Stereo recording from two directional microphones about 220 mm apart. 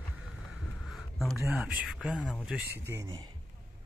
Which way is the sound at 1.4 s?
5° right (ahead or behind).